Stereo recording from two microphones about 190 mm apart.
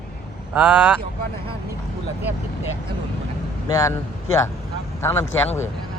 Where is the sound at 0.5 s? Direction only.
5° right (ahead or behind).